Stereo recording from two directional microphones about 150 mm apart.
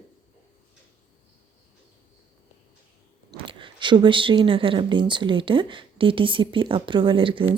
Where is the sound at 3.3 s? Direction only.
35° right (ahead or behind).